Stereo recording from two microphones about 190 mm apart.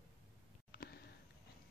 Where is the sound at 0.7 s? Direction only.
55° left (ahead or behind).